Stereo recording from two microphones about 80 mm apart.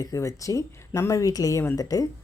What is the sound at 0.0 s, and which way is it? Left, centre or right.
Speech, left.